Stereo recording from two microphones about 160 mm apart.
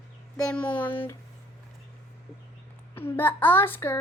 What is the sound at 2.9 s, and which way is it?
Child singing, 15° left (ahead or behind).